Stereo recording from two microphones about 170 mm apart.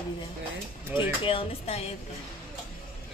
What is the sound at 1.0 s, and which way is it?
Speech, 30° left (ahead or behind).